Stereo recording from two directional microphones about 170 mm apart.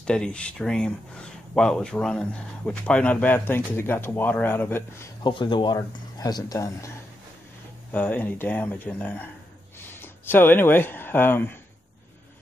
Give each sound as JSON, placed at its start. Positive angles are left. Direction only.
{"t": 0.0, "sound": "speech", "side_deg": 5}
{"t": 5.2, "sound": "speech", "side_deg": 25}
{"t": 7.9, "sound": "speech", "side_deg": 10}